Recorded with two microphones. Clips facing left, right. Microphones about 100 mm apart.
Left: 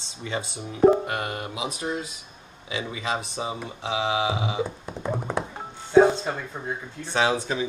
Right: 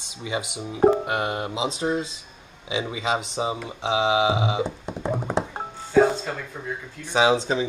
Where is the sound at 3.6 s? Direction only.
20° right (ahead or behind).